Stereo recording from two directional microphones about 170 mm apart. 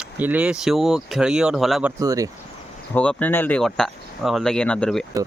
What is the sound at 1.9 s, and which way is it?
Speech, 20° right (ahead or behind).